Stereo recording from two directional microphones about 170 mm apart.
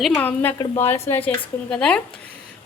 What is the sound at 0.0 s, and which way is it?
A woman's voice, 5° left (ahead or behind).